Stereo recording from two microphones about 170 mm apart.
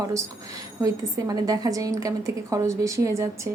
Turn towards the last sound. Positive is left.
turn(degrees=-20)  # may be behind; listen again after turning